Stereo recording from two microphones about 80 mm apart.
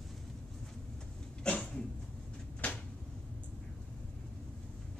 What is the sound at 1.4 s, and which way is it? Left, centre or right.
Cough, centre.